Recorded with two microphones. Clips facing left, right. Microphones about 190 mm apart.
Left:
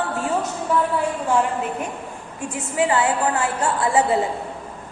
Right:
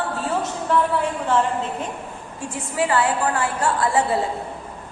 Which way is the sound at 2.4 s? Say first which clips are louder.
Left 2 dB; 20° left (ahead or behind).